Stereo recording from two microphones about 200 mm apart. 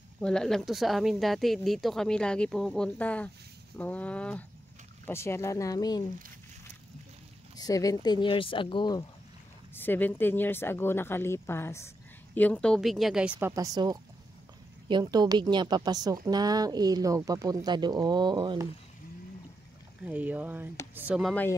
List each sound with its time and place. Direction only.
0.2 s speech: 5° left (ahead or behind); by 6.0 s 20° left (ahead or behind)
7.5 s speech: 20° left (ahead or behind)
9.8 s a woman's voice: 10° left (ahead or behind); by 18.7 s 20° right (ahead or behind)
20.1 s speech: 5° right (ahead or behind)